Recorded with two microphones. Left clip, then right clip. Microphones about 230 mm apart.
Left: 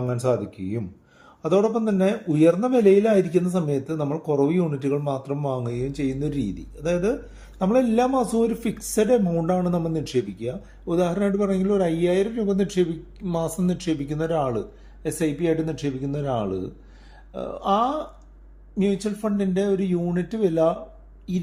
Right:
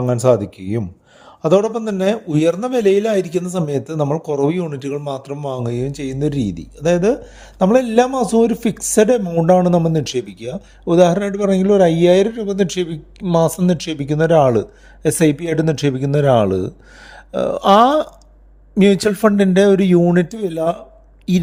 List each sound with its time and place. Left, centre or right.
0.0 s speech: right
20.4 s speech: centre